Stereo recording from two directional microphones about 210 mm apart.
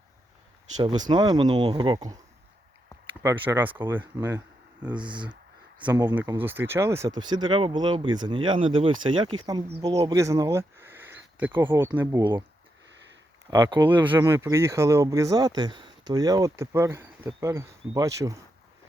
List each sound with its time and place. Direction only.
0.8 s speech: 20° right (ahead or behind)
3.2 s speech: 10° right (ahead or behind)
12.2 s speech: 25° right (ahead or behind)
13.5 s speech: 5° right (ahead or behind)